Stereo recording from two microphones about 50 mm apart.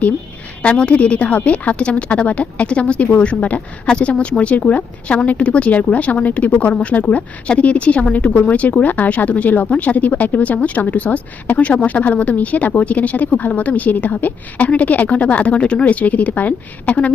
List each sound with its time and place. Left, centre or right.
0.6 s speech: left